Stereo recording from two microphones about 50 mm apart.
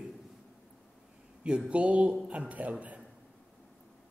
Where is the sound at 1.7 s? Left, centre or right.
Right.